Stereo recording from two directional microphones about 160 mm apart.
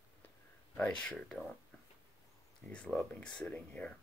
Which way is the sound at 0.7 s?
5° left (ahead or behind).